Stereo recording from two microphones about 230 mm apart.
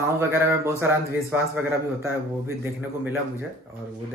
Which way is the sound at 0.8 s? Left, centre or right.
Centre.